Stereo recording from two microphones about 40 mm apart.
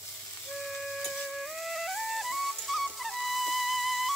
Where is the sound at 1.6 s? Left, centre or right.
Centre.